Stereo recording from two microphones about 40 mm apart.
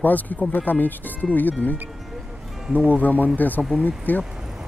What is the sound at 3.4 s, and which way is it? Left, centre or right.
Speech, left.